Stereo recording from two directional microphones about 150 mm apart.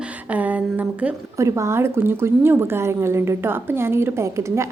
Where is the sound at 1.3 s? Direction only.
20° right (ahead or behind).